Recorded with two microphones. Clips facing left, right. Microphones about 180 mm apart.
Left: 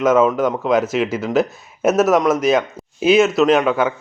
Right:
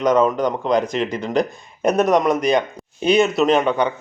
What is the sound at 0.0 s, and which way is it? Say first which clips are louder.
Speech: left 2 dB; 5° left (ahead or behind).